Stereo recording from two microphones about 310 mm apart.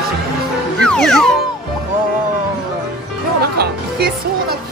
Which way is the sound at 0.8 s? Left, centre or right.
Centre.